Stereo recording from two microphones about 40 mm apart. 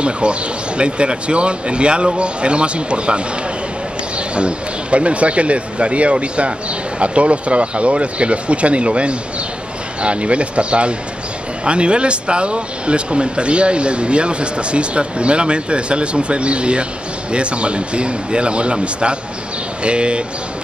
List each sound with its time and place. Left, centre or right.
0.0 s speech: right
4.4 s speech: right